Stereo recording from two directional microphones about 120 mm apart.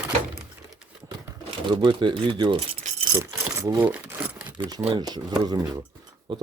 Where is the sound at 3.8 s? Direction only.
15° right (ahead or behind).